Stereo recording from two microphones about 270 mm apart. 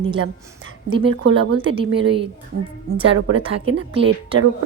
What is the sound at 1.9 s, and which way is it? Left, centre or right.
Speech, right.